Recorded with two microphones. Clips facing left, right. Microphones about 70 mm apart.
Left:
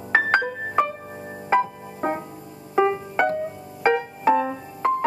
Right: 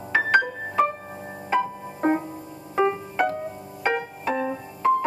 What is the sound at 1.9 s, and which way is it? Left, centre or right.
Music, centre.